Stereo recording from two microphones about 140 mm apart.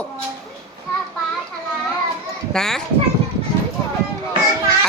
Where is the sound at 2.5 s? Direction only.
5° left (ahead or behind).